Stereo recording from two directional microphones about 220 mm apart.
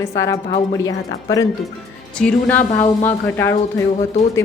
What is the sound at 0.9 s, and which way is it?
A woman's voice, 15° left (ahead or behind).